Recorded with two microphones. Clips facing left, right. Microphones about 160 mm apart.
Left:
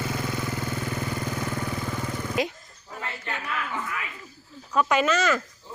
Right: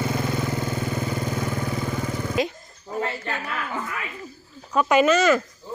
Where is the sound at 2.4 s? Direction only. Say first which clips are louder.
Right 2 dB; 10° left (ahead or behind).